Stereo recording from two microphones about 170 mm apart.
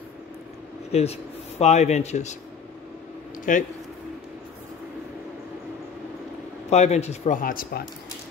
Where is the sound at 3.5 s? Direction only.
50° left (ahead or behind).